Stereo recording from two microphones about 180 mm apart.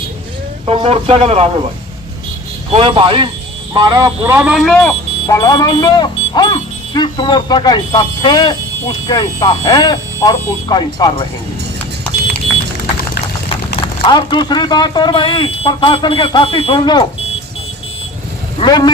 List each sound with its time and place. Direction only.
0.6 s speech: 30° right (ahead or behind)
2.7 s speech: 30° right (ahead or behind)
4.2 s speech: 10° right (ahead or behind)
4.6 s speech: 5° left (ahead or behind)
5.2 s speech: 25° left (ahead or behind)
13.8 s speech: 25° left (ahead or behind)
18.6 s speech: 25° left (ahead or behind)